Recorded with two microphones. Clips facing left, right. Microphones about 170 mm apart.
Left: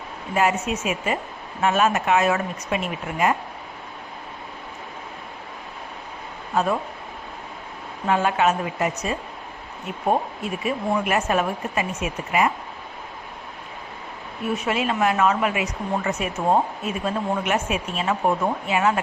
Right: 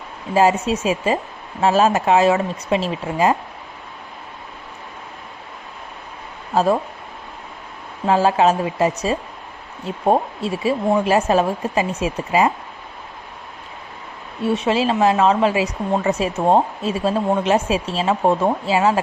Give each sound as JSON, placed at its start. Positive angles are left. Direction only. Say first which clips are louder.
{"t": 0.3, "sound": "speech", "louder": "right 6 dB", "side_deg": -30}
{"t": 6.5, "sound": "speech", "louder": "right 5 dB", "side_deg": -30}
{"t": 8.0, "sound": "speech", "louder": "right 5 dB", "side_deg": -30}
{"t": 14.4, "sound": "speech", "louder": "right 6 dB", "side_deg": -30}